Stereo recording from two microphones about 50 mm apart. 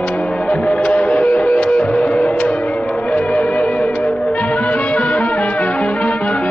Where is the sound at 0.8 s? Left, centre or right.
Left.